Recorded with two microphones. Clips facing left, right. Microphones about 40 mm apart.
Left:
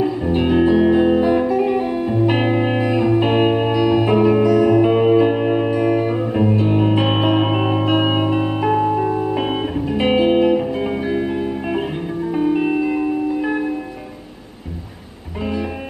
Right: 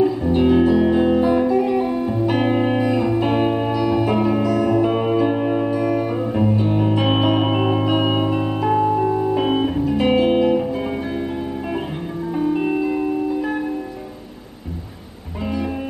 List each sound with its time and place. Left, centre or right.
0.0 s music: centre